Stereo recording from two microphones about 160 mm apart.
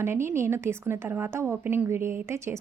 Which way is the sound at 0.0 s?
15° right (ahead or behind).